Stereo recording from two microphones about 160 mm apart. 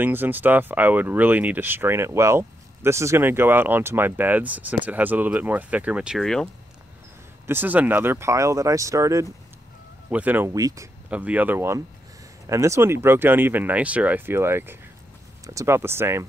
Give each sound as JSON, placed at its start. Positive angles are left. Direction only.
{"t": 0.0, "sound": "speech", "side_deg": -10}
{"t": 7.4, "sound": "speech", "side_deg": -10}
{"t": 11.1, "sound": "speech", "side_deg": -10}